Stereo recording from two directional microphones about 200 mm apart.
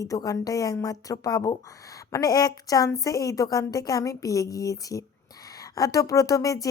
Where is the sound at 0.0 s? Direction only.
15° left (ahead or behind).